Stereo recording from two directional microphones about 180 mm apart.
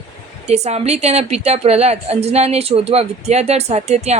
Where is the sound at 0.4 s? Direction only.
35° right (ahead or behind).